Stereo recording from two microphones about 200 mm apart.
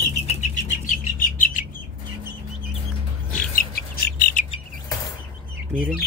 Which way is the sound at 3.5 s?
50° left (ahead or behind).